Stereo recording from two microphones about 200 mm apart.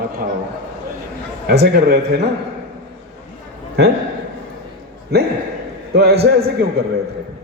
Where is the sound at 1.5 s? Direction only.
55° right (ahead or behind).